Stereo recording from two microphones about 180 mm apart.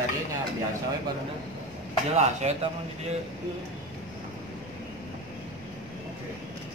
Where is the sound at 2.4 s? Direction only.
35° right (ahead or behind).